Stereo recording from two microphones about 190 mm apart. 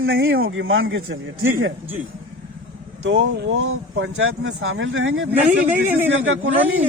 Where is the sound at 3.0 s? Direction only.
70° right (ahead or behind).